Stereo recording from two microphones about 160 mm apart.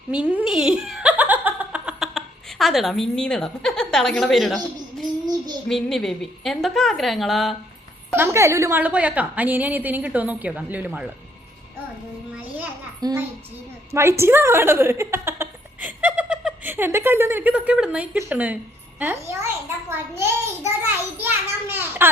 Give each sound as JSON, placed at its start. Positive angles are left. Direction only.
{"t": 0.1, "sound": "giggle", "side_deg": -10}
{"t": 5.6, "sound": "a woman's voice", "side_deg": 0}
{"t": 8.1, "sound": "a woman's voice", "side_deg": -15}
{"t": 13.0, "sound": "a child's voice", "side_deg": -25}
{"t": 13.9, "sound": "a sound", "side_deg": -15}
{"t": 16.6, "sound": "a woman's voice", "side_deg": -15}
{"t": 19.9, "sound": "a sound", "side_deg": -15}